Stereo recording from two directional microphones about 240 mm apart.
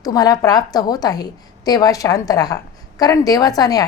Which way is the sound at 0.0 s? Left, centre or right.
Centre.